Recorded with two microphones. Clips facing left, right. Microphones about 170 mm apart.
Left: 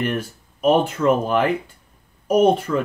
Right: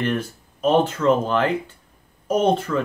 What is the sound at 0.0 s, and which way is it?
Speech, 10° left (ahead or behind).